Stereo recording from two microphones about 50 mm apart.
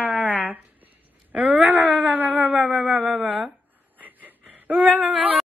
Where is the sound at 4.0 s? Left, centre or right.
Right.